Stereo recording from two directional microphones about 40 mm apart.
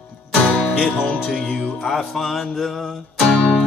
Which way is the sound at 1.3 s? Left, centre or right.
Centre.